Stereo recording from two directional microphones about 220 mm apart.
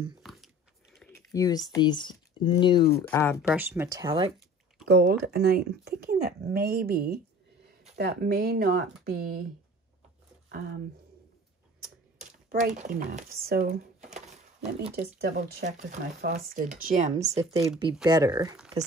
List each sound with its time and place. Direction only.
0.2 s a sound: centre (ahead or behind)
1.1 s speech: 15° left (ahead or behind)
3.4 s speech: 10° right (ahead or behind)
4.8 s speech: 45° right (ahead or behind)
12.2 s speech: 35° right (ahead or behind)
15.1 s speech: 45° right (ahead or behind); by 18.6 s 20° right (ahead or behind)